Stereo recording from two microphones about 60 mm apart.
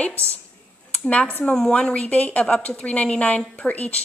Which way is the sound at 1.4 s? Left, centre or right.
Centre.